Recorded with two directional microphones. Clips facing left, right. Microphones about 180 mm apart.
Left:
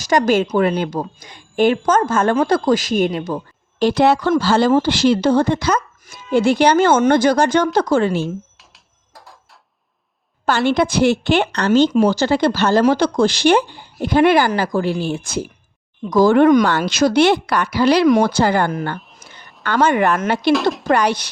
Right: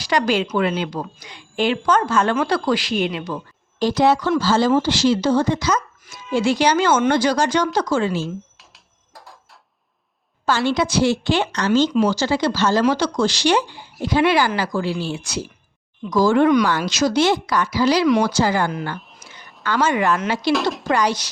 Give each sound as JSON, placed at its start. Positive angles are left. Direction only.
{"t": 0.0, "sound": "a woman's voice", "side_deg": 45}
{"t": 3.8, "sound": "speech", "side_deg": 65}
{"t": 8.5, "sound": "a sound", "side_deg": 0}
{"t": 10.4, "sound": "a woman's voice", "side_deg": 60}
{"t": 16.6, "sound": "speech", "side_deg": 60}
{"t": 20.5, "sound": "speech", "side_deg": 0}
{"t": 20.9, "sound": "speech", "side_deg": 60}